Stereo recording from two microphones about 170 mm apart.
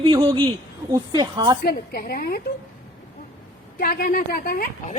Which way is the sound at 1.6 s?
65° left (ahead or behind).